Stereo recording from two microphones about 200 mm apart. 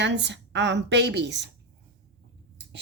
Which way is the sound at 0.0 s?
60° right (ahead or behind).